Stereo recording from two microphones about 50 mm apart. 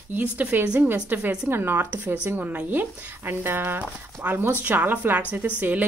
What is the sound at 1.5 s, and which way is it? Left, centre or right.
A woman's voice, right.